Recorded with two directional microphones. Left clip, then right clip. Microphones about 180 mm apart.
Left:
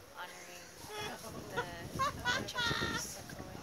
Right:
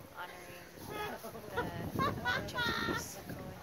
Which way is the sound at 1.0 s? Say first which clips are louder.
Right 1 dB; 50° left (ahead or behind).